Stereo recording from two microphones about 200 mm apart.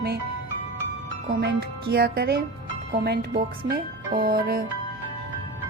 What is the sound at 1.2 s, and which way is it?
Speech, 50° right (ahead or behind).